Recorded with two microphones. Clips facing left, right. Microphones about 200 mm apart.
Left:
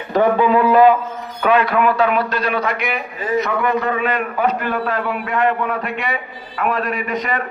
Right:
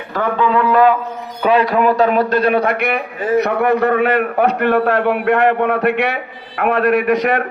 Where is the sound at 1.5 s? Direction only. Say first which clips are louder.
Right 2 dB; 35° right (ahead or behind).